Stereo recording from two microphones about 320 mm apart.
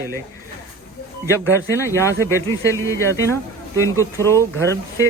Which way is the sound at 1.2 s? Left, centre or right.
Centre.